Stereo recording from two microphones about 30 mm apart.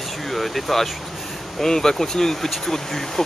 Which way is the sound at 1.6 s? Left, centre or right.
Centre.